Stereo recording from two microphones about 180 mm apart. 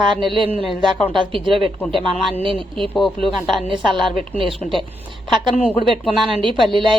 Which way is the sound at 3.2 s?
Centre (ahead or behind).